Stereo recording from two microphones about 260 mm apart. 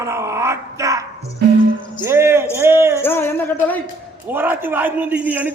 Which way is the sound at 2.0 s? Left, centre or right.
Centre.